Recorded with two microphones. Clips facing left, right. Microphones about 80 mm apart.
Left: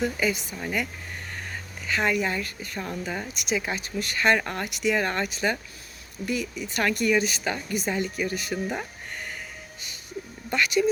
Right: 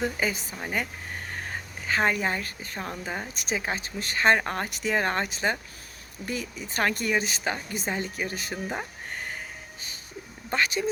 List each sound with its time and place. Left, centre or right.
0.0 s speech: right
1.5 s speech: right
3.3 s speech: right
10.5 s speech: right